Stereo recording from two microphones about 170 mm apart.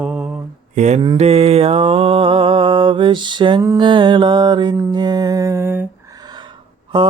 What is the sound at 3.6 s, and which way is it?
Mantra, 15° right (ahead or behind).